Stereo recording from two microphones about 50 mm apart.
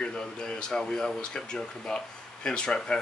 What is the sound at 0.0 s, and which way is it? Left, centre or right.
Speech, centre.